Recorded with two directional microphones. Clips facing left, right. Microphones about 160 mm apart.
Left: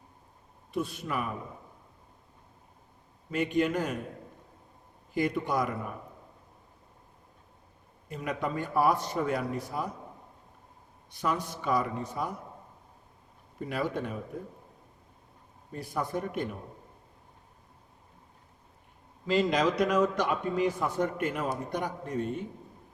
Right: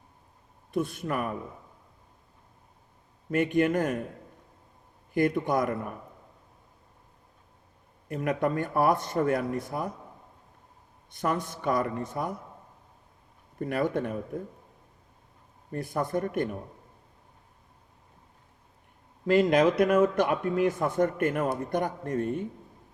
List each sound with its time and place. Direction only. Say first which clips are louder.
0.7 s speech: right 3 dB; 50° right (ahead or behind)
3.2 s speech: right 3 dB; 50° right (ahead or behind)
5.1 s speech: right 3 dB; 55° right (ahead or behind)
8.0 s speech: right 6 dB; 50° right (ahead or behind)
11.1 s speech: right 2 dB; 50° right (ahead or behind)
13.7 s speech: right 4 dB; 50° right (ahead or behind)
15.7 s speech: right 4 dB; 50° right (ahead or behind)
19.2 s a man's voice: right 5 dB; 55° right (ahead or behind)